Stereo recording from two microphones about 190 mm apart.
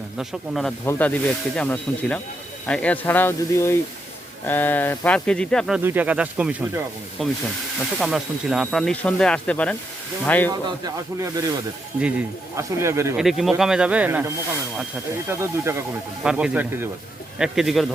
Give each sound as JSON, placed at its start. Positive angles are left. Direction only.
{"t": 0.2, "sound": "speech", "side_deg": 0}
{"t": 5.8, "sound": "speech", "side_deg": -10}
{"t": 10.5, "sound": "speech", "side_deg": -20}
{"t": 11.9, "sound": "speech", "side_deg": -5}
{"t": 13.1, "sound": "speech", "side_deg": 0}
{"t": 15.3, "sound": "speech", "side_deg": -15}